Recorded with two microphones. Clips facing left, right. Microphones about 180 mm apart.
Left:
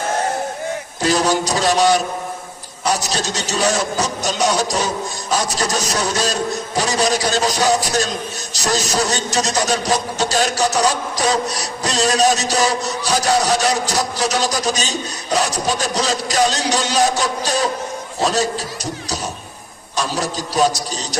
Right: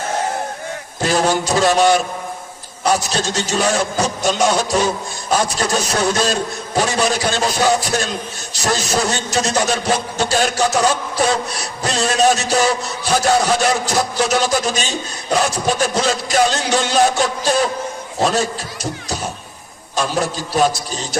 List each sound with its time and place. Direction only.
1.0 s a man's voice: 40° left (ahead or behind)